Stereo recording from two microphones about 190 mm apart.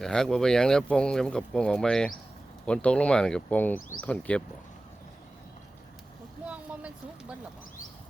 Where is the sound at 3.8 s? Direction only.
45° left (ahead or behind).